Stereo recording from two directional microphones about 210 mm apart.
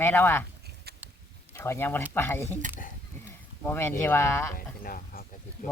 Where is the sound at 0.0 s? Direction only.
10° left (ahead or behind).